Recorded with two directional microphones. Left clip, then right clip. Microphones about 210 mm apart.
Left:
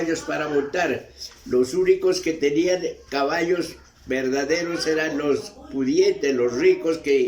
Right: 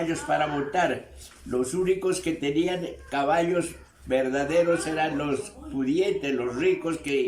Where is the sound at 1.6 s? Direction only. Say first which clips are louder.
Left 5 dB; 20° right (ahead or behind).